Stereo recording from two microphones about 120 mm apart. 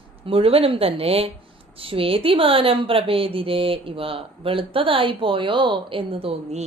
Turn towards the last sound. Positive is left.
turn(degrees=-55)  # may be behind; listen again after turning